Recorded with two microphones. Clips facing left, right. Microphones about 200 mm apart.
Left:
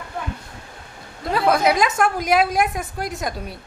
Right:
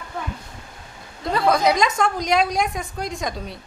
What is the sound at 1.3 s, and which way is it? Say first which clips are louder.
A woman's voice: left 1 dB; 5° left (ahead or behind).